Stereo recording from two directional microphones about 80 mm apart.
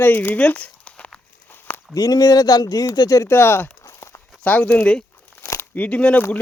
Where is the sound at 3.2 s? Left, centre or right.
Left.